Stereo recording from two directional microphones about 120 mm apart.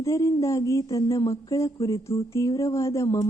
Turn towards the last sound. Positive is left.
turn(degrees=25)  # may be behind; listen again after turning